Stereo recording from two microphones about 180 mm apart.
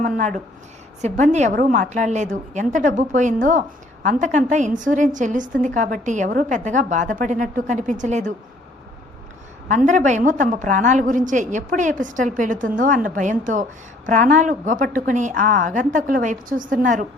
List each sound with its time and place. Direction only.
0.0 s a woman's voice: 45° right (ahead or behind)
9.6 s a woman's voice: 40° right (ahead or behind)